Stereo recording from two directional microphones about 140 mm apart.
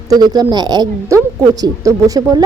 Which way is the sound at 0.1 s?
30° right (ahead or behind).